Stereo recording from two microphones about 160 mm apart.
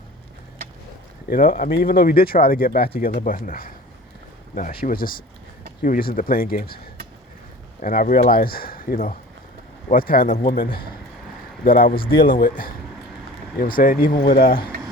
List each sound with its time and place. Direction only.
1.3 s speech: 60° left (ahead or behind)
7.8 s speech: 60° left (ahead or behind)
12.0 s speech: 30° left (ahead or behind)
12.3 s speech: 60° left (ahead or behind)